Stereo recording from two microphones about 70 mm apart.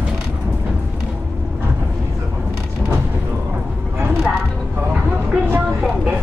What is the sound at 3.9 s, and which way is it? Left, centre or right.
Vehicle, centre.